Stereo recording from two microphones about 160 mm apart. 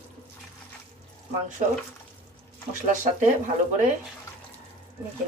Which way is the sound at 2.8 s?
50° right (ahead or behind).